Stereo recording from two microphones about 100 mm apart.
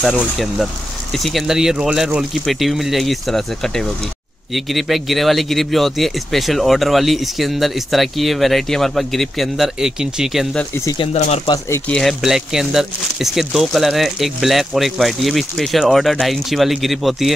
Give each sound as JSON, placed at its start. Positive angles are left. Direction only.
{"t": 0.2, "sound": "speech", "side_deg": 0}
{"t": 11.1, "sound": "speech", "side_deg": 90}
{"t": 11.9, "sound": "speech", "side_deg": 0}